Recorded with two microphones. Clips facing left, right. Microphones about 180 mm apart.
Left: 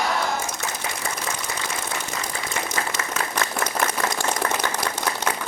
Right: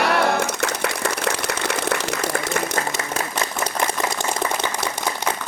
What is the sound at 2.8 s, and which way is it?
Applause, 45° right (ahead or behind).